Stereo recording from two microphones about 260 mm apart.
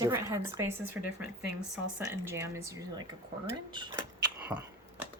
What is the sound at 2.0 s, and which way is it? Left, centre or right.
Speech, centre.